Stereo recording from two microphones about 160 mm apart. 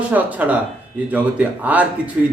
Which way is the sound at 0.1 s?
10° right (ahead or behind).